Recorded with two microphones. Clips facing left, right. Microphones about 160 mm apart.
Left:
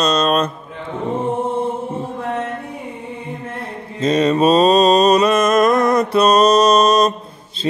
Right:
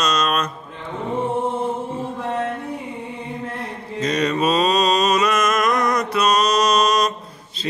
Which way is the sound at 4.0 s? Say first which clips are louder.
Left 6 dB; 25° left (ahead or behind).